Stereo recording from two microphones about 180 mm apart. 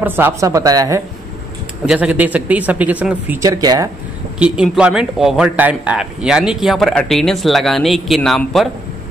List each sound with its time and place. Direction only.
0.0 s speech: 10° right (ahead or behind)
1.9 s speech: 10° right (ahead or behind)
3.4 s speech: 20° right (ahead or behind)
4.4 s speech: 5° right (ahead or behind)